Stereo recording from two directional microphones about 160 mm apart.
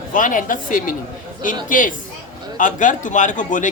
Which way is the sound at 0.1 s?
55° left (ahead or behind).